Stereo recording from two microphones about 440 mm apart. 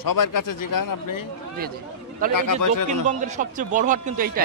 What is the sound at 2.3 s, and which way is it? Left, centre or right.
Speech, left.